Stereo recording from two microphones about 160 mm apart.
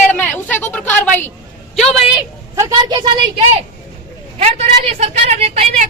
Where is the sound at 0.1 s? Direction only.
10° left (ahead or behind).